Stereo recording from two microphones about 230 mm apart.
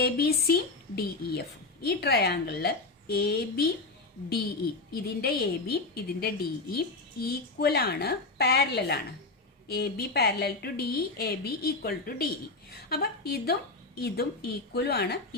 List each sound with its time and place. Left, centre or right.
0.0 s a woman's voice: left
4.9 s a woman's voice: left